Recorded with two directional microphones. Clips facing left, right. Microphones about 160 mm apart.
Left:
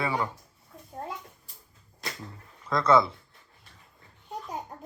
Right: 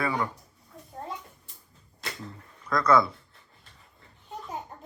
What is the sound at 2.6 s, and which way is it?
Speech, 25° left (ahead or behind).